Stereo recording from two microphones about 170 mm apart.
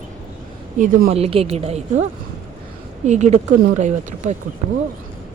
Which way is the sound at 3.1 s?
40° right (ahead or behind).